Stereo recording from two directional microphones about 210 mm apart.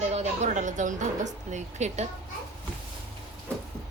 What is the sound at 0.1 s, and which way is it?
A woman's voice, 35° right (ahead or behind).